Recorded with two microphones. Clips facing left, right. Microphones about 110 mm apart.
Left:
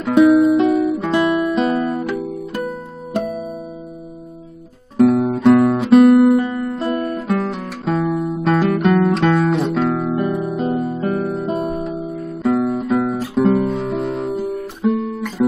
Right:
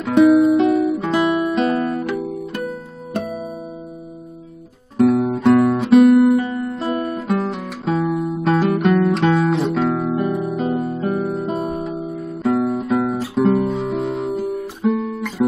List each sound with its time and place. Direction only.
0.0 s music: centre (ahead or behind)
4.9 s music: centre (ahead or behind)